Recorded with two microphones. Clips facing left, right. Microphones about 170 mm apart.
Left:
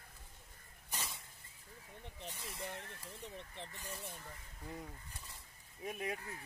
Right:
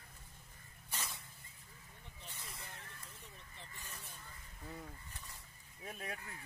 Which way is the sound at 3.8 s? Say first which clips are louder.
Left 6 dB; 40° left (ahead or behind).